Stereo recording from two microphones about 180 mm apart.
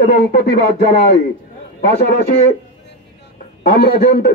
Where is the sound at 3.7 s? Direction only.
60° left (ahead or behind).